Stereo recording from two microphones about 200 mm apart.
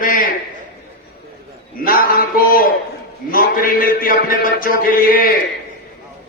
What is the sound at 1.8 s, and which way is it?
A man's voice, 45° left (ahead or behind).